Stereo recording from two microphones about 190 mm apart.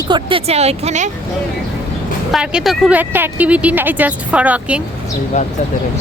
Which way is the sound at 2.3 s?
5° right (ahead or behind).